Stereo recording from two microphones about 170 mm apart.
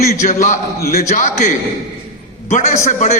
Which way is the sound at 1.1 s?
50° left (ahead or behind).